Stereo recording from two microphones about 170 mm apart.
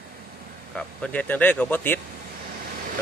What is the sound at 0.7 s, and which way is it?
Speech, 5° left (ahead or behind).